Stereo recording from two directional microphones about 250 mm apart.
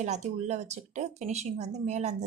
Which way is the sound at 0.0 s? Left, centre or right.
Right.